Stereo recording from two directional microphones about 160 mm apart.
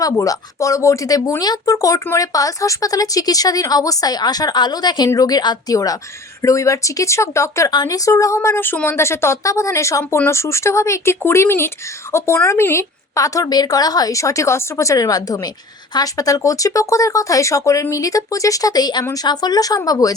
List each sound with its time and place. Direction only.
0.0 s speech: 20° left (ahead or behind)